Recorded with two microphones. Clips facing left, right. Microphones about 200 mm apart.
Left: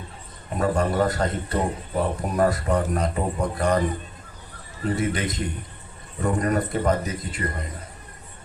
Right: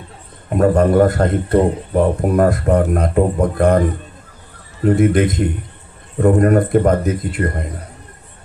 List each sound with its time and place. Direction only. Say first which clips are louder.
0.5 s speech: right 10 dB; 55° right (ahead or behind)
4.9 s speech: right 11 dB; 55° right (ahead or behind)